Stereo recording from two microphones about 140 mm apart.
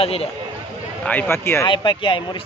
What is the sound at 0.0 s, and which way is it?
Speech, 45° left (ahead or behind).